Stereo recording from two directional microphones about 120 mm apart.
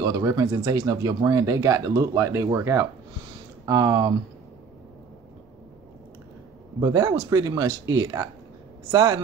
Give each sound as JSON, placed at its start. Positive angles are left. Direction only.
{"t": 0.0, "sound": "speech", "side_deg": -30}
{"t": 6.8, "sound": "speech", "side_deg": -30}